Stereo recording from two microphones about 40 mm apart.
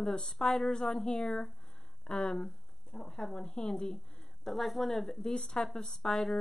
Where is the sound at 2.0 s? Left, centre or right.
Centre.